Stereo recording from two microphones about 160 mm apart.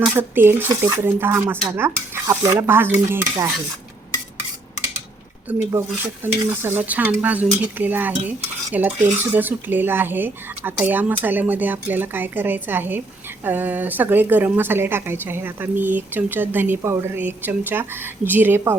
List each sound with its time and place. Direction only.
0.0 s speech: 15° right (ahead or behind)
5.7 s speech: 15° right (ahead or behind)